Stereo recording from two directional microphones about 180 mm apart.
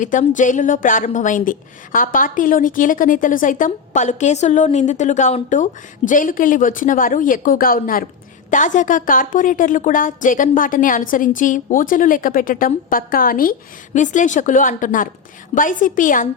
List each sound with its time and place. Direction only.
0.0 s a woman's voice: 45° left (ahead or behind)